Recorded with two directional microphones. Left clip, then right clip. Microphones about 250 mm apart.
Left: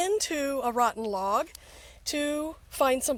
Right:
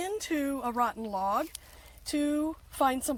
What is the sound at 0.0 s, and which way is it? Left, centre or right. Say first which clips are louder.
Speech: left 5 dB; left.